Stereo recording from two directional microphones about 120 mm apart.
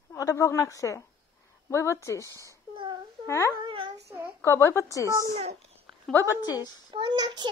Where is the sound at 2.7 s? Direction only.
45° right (ahead or behind).